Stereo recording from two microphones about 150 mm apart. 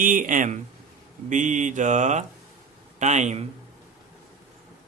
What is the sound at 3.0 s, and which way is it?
Speech, 50° right (ahead or behind).